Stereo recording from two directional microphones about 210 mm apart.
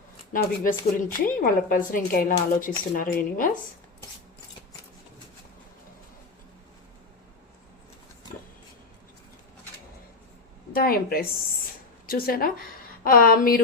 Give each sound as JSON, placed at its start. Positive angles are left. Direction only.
{"t": 0.3, "sound": "speech", "side_deg": 40}
{"t": 10.8, "sound": "speech", "side_deg": 45}